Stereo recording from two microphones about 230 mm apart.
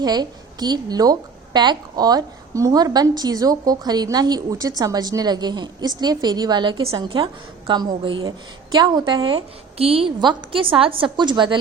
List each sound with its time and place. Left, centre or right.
0.0 s a woman's voice: centre